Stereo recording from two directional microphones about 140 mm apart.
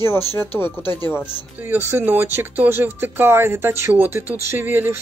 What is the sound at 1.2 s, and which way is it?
Speech, 10° right (ahead or behind).